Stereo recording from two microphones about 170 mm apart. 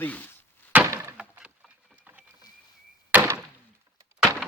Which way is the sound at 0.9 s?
20° right (ahead or behind).